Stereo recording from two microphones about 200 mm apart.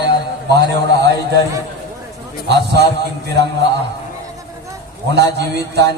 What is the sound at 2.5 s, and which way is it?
Speech, 55° right (ahead or behind).